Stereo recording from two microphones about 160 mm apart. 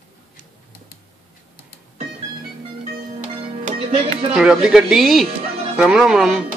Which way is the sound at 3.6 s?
40° right (ahead or behind).